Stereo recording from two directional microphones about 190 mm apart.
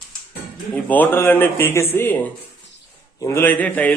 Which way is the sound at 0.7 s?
10° left (ahead or behind).